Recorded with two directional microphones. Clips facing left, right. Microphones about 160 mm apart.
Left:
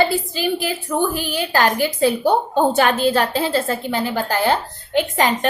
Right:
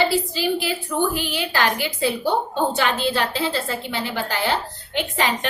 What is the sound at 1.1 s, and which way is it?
A woman's voice, 45° left (ahead or behind).